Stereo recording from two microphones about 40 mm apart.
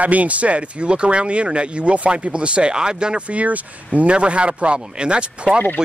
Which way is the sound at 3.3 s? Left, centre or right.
Right.